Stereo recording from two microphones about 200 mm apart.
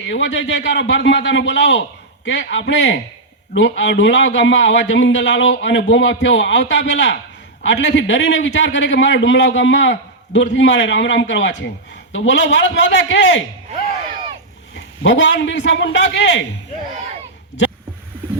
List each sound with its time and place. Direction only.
0.1 s a man's voice: 60° left (ahead or behind)
15.0 s a man's voice: 65° left (ahead or behind)